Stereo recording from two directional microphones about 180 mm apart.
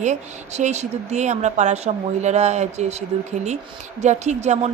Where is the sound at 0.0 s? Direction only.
40° right (ahead or behind).